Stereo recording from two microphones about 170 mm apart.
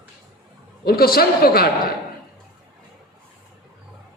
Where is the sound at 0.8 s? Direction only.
65° left (ahead or behind).